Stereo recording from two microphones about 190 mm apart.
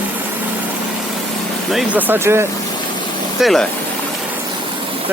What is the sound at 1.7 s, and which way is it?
Speech, centre (ahead or behind).